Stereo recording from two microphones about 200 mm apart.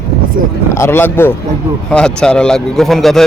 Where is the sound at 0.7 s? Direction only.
10° left (ahead or behind).